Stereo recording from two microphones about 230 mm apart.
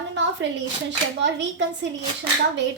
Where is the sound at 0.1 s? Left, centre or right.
Right.